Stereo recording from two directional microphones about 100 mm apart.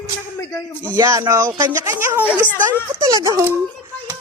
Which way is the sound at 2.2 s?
15° right (ahead or behind).